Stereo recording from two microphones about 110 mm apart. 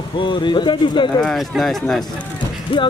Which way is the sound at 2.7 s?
55° left (ahead or behind).